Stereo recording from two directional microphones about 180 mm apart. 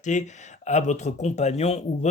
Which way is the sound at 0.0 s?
40° left (ahead or behind).